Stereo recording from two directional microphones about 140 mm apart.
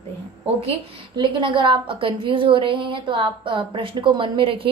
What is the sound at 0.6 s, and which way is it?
A woman's voice, 40° right (ahead or behind).